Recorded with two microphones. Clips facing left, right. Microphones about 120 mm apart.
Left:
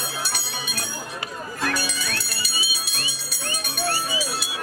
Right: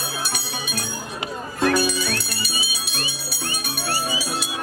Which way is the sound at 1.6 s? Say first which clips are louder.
Right 8 dB; 25° right (ahead or behind).